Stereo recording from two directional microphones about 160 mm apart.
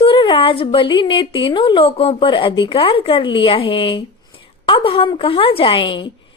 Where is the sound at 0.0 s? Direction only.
35° left (ahead or behind).